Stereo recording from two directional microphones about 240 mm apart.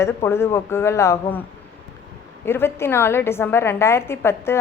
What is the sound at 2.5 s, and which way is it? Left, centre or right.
A woman's voice, centre.